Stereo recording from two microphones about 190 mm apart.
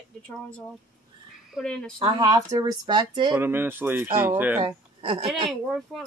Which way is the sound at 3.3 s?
10° right (ahead or behind).